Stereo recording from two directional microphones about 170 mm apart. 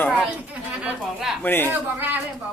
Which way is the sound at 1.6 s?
10° right (ahead or behind).